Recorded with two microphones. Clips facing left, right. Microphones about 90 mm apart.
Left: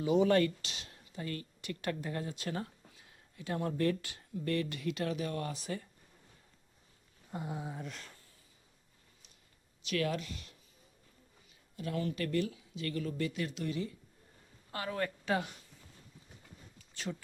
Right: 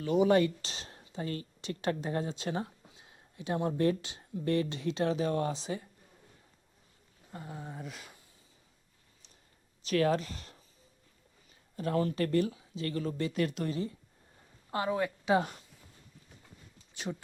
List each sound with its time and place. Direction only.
0.2 s speech: 20° right (ahead or behind)
0.6 s speech: 35° right (ahead or behind)
7.3 s a sound: 15° left (ahead or behind)
7.7 s speech: 5° right (ahead or behind)
9.8 s speech: 35° right (ahead or behind)
11.8 s speech: 40° right (ahead or behind)
13.3 s speech: 50° right (ahead or behind)
14.7 s a woman's voice: 25° right (ahead or behind)
14.9 s speech: 15° right (ahead or behind)
16.7 s a sound: 20° right (ahead or behind)